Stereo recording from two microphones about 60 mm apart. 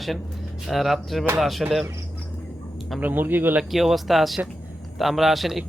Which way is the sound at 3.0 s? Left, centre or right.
Right.